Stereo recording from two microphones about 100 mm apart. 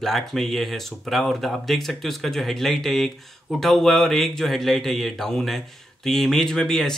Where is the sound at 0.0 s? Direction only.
5° left (ahead or behind).